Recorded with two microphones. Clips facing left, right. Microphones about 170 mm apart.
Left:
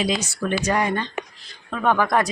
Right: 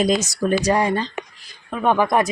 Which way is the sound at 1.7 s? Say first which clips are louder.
Right 2 dB; 15° right (ahead or behind).